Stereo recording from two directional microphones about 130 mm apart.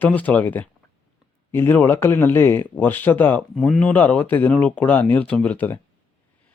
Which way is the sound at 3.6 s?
5° left (ahead or behind).